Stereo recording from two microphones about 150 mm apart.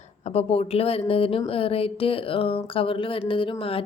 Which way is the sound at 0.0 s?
45° left (ahead or behind).